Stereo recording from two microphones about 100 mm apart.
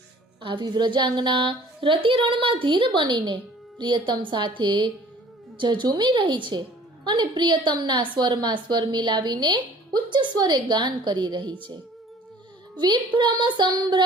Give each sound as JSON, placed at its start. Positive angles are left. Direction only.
{"t": 0.4, "sound": "a woman's voice", "side_deg": -50}
{"t": 12.7, "sound": "a woman's voice", "side_deg": -50}